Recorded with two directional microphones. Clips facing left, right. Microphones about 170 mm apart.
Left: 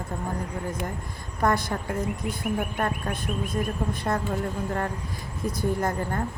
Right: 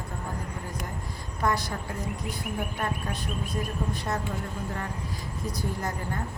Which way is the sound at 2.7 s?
50° left (ahead or behind).